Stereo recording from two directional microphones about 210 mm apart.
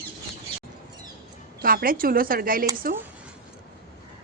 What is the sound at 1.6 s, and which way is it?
Speech, 45° right (ahead or behind).